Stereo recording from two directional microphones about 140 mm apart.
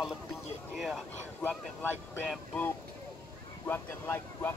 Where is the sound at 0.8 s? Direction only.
Centre (ahead or behind).